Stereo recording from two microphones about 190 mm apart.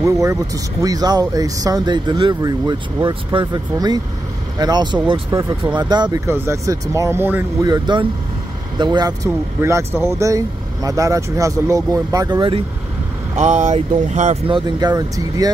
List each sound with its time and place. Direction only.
0.0 s speech: 15° right (ahead or behind)
7.6 s speech: 20° right (ahead or behind)
13.4 s a sound: 35° right (ahead or behind)
14.5 s speech: 20° right (ahead or behind)